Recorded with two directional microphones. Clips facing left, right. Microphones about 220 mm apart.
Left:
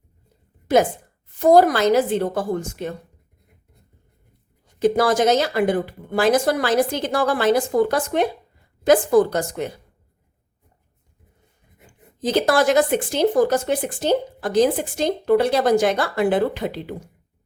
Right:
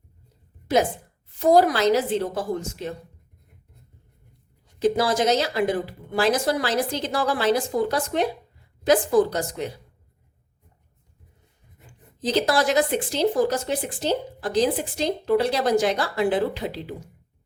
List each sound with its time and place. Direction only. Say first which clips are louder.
1.4 s speech: left 3 dB; 50° left (ahead or behind)
4.8 s speech: left 4 dB; 55° left (ahead or behind)
12.2 s speech: left 4 dB; 50° left (ahead or behind)